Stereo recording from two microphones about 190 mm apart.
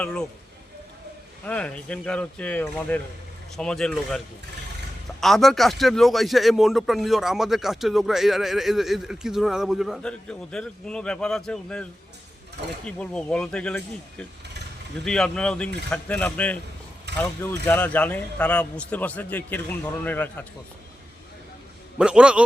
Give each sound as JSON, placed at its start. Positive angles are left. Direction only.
{"t": 0.0, "sound": "a man's voice", "side_deg": 5}
{"t": 1.5, "sound": "a man's voice", "side_deg": 5}
{"t": 5.2, "sound": "a man's voice", "side_deg": 0}
{"t": 17.1, "sound": "vehicle", "side_deg": -60}
{"t": 17.7, "sound": "a man's voice", "side_deg": 10}
{"t": 21.9, "sound": "a man's voice", "side_deg": -5}